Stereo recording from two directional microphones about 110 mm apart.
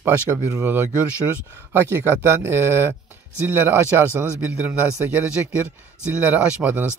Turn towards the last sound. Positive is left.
turn(degrees=-15)  # may be behind; listen again after turning